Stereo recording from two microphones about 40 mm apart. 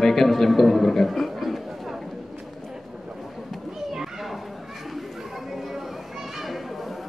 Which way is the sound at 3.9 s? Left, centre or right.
Centre.